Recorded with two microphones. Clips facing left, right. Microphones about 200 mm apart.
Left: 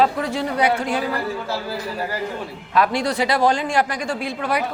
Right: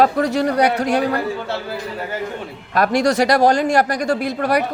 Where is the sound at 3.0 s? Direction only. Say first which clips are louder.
Right 6 dB; 80° right.